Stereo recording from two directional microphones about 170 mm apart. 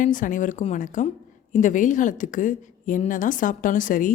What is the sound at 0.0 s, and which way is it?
A woman's voice, 50° left (ahead or behind).